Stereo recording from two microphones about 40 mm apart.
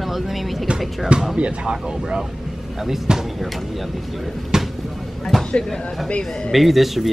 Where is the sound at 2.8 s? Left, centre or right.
Centre.